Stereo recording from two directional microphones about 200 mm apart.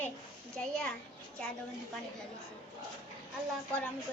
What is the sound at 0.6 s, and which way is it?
Speech, 5° left (ahead or behind).